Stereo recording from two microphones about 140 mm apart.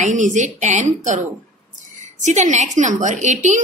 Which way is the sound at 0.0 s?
60° right (ahead or behind).